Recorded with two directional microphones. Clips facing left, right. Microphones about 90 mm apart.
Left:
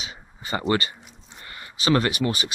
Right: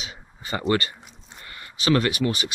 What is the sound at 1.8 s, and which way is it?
Speech, 35° left (ahead or behind).